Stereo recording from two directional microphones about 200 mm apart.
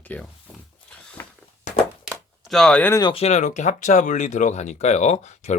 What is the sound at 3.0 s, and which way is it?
Speech, 30° left (ahead or behind).